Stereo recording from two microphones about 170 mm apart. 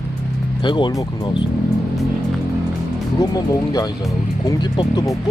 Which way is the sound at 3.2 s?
20° left (ahead or behind).